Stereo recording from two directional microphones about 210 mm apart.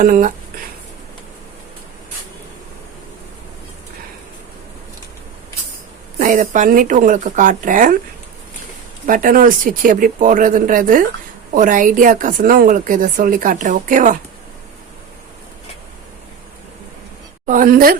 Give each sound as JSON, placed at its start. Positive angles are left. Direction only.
{"t": 0.0, "sound": "a woman's voice", "side_deg": -40}
{"t": 6.1, "sound": "a woman's voice", "side_deg": -40}
{"t": 9.0, "sound": "a woman's voice", "side_deg": -40}
{"t": 17.4, "sound": "a woman's voice", "side_deg": -40}